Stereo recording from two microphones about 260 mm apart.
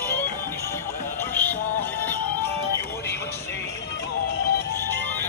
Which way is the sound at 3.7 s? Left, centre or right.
Left.